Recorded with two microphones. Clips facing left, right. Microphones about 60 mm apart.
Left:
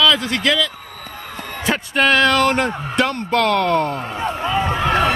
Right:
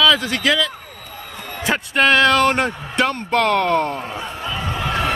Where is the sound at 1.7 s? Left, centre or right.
Centre.